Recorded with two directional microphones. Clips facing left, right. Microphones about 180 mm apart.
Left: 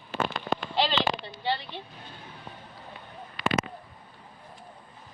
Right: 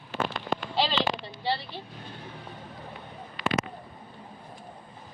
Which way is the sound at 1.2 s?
35° right (ahead or behind).